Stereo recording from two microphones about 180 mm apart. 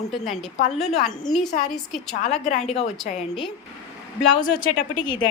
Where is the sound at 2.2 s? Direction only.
40° left (ahead or behind).